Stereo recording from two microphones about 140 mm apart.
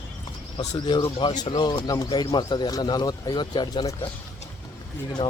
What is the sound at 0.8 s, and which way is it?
Speech, 35° left (ahead or behind).